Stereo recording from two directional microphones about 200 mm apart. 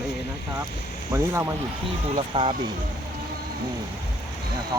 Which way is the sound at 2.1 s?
30° right (ahead or behind).